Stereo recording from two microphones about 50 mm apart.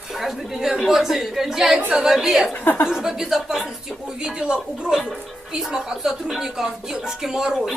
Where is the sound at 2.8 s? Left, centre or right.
Centre.